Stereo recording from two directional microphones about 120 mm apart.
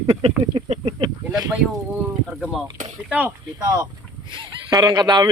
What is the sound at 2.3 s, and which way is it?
Speech, 5° right (ahead or behind).